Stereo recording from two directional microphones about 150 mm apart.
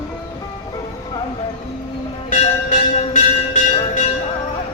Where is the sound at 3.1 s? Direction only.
55° left (ahead or behind).